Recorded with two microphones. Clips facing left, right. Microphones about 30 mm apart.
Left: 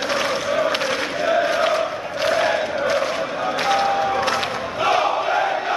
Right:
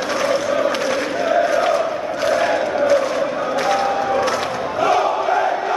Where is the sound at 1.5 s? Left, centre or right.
Centre.